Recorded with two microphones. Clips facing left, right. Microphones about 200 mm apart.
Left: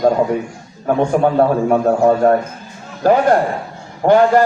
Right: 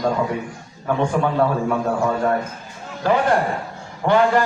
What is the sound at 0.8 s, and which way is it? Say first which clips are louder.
A man's voice: left 6 dB; 40° left (ahead or behind).